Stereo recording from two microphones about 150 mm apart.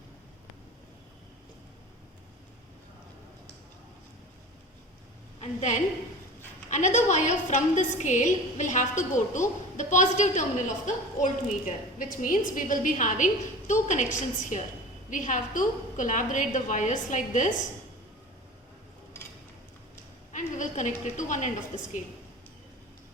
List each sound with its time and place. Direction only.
5.4 s a woman's voice: 50° left (ahead or behind)
20.3 s a woman's voice: 55° left (ahead or behind)